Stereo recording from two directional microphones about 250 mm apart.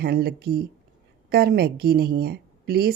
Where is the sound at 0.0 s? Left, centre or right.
Right.